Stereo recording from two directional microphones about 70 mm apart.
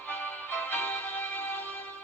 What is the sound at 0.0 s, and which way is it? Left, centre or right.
Music, left.